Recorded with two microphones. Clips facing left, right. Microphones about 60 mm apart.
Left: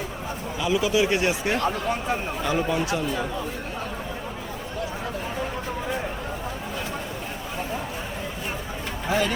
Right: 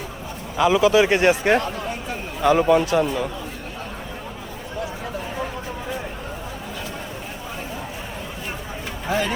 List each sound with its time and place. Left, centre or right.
0.6 s a man's voice: right
9.0 s speech: centre